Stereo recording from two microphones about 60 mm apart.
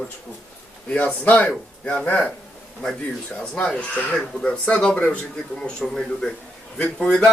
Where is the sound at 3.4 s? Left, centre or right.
Centre.